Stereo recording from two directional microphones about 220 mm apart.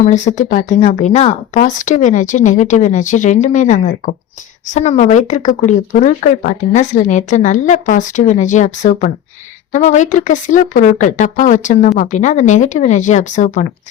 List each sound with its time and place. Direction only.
0.0 s speech: 30° left (ahead or behind)